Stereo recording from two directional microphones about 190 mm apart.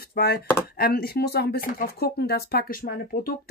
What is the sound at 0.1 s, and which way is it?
Speech, 55° left (ahead or behind).